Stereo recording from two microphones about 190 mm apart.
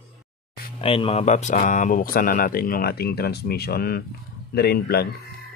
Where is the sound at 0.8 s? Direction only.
30° left (ahead or behind); by 5.0 s 55° left (ahead or behind).